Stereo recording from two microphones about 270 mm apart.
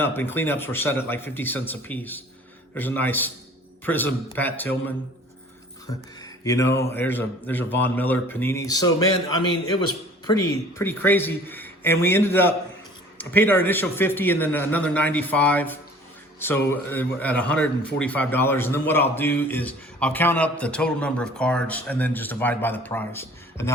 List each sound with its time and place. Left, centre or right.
0.0 s a man's voice: centre
6.2 s mantra: centre
6.7 s a man's voice: centre
10.8 s a man's voice: centre